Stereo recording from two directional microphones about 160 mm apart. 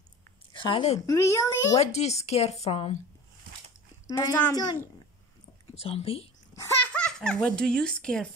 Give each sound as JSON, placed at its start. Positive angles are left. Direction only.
{"t": 0.5, "sound": "a woman's voice", "side_deg": 30}
{"t": 0.9, "sound": "a child's voice", "side_deg": 20}
{"t": 1.8, "sound": "speech", "side_deg": 45}
{"t": 4.5, "sound": "a child's voice", "side_deg": 25}
{"t": 5.8, "sound": "speech", "side_deg": 40}
{"t": 6.5, "sound": "a child's voice", "side_deg": 10}